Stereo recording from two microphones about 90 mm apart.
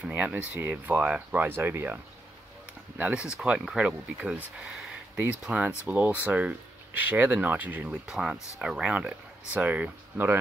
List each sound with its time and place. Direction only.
0.0 s speech: 15° right (ahead or behind)
3.0 s speech: 15° right (ahead or behind)
8.1 s speech: 5° right (ahead or behind)